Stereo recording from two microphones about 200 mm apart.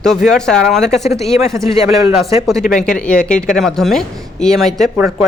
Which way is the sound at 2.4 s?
Centre (ahead or behind).